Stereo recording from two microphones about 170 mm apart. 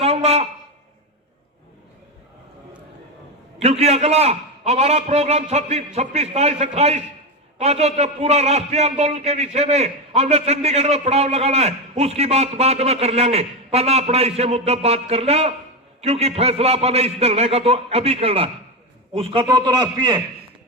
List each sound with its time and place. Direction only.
0.0 s a sound: 40° right (ahead or behind)
3.6 s a man's voice: 40° right (ahead or behind)
19.5 s a man's voice: 25° right (ahead or behind)